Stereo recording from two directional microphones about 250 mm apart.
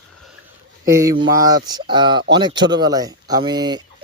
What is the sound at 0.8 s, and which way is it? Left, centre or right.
Speech, centre.